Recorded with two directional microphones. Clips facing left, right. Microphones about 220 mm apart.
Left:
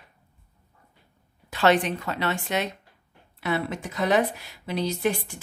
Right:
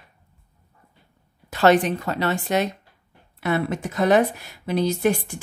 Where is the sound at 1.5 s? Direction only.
40° right (ahead or behind).